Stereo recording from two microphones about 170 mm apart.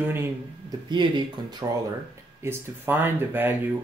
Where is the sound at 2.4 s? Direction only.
10° right (ahead or behind).